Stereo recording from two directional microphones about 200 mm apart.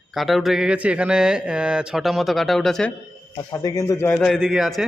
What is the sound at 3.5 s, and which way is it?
Speech, 15° left (ahead or behind).